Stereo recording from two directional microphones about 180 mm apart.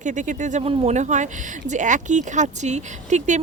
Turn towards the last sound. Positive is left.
turn(degrees=-40)  # may be behind; listen again after turning